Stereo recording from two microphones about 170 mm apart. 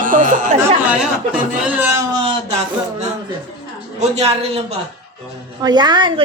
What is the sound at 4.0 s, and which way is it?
Speech, 40° right (ahead or behind).